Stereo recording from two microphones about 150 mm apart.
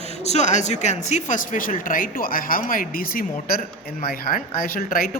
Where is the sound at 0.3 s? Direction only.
50° left (ahead or behind).